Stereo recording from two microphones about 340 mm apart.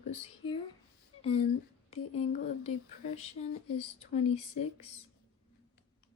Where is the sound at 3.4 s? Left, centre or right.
Left.